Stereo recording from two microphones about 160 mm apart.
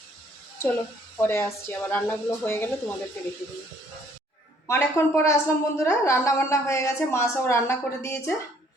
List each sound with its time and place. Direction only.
1.2 s a woman's voice: 15° left (ahead or behind)
4.6 s a woman's voice: 15° left (ahead or behind)